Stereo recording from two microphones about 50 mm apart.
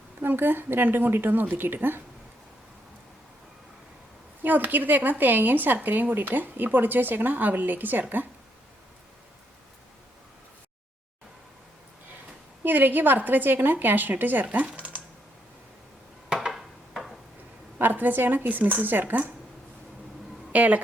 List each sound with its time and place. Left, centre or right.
0.2 s speech: right
4.4 s a woman's voice: right
12.6 s a woman's voice: right
14.8 s typing: right
16.5 s a sound: centre
17.7 s a woman's voice: right
20.5 s a woman's voice: right